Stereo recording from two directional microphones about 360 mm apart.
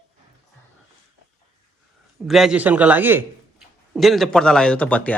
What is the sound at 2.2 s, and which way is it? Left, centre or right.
A man's voice, centre.